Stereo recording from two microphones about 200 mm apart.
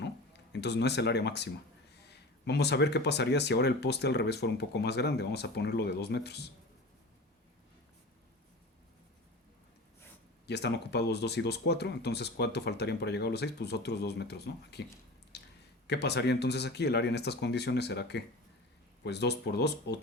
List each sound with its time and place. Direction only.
0.5 s speech: 60° left (ahead or behind)
10.4 s speech: 55° left (ahead or behind)
15.3 s squish: 55° left (ahead or behind)
15.9 s speech: 55° left (ahead or behind)